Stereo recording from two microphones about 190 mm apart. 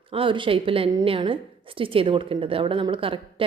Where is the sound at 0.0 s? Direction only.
30° right (ahead or behind).